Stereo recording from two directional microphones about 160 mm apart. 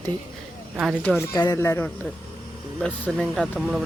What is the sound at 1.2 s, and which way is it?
Speech, 20° left (ahead or behind).